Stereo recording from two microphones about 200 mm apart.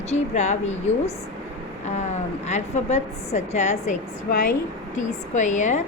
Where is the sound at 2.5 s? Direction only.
35° left (ahead or behind).